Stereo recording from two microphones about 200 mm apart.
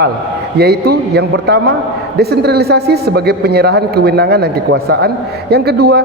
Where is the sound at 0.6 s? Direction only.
55° right (ahead or behind).